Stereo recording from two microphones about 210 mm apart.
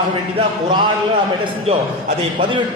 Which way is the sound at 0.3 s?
20° right (ahead or behind).